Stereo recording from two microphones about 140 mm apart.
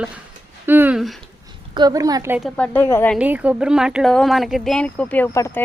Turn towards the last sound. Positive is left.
turn(degrees=20)  # may be behind; listen again after turning